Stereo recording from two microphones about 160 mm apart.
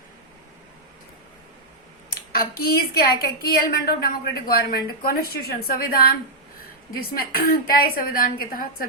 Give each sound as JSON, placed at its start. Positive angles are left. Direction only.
{"t": 2.3, "sound": "a woman's voice", "side_deg": 70}